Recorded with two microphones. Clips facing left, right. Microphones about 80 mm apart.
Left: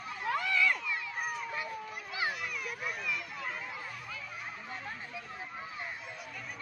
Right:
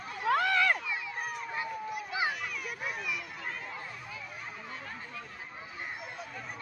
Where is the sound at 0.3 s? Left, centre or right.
Right.